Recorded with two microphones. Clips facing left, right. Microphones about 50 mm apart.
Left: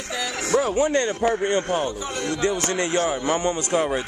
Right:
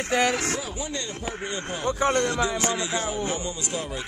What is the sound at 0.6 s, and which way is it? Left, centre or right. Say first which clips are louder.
Speech: left 12 dB; left.